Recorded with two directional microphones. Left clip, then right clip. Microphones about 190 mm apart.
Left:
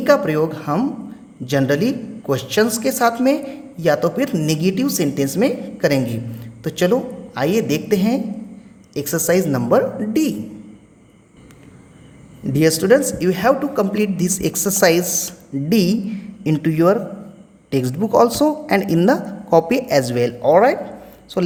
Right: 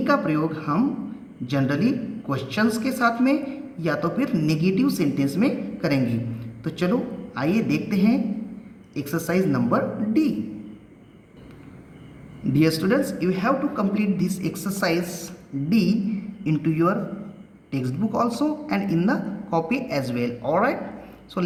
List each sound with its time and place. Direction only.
0.0 s a man's voice: 50° left (ahead or behind)
12.5 s a man's voice: 45° left (ahead or behind)